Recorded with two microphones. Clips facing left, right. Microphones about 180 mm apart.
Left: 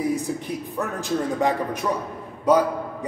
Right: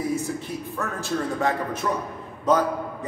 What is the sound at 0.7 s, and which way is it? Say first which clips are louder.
A man's voice: left 2 dB; 15° left (ahead or behind).